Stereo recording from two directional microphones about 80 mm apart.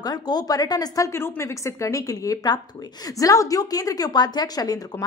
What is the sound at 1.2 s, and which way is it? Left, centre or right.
A woman's voice, left.